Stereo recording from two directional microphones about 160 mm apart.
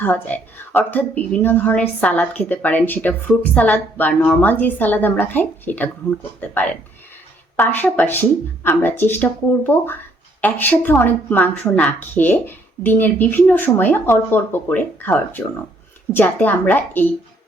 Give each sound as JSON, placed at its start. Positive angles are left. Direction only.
{"t": 0.0, "sound": "a woman's voice", "side_deg": 10}